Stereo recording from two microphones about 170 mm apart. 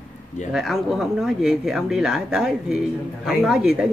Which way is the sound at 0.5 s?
Centre (ahead or behind).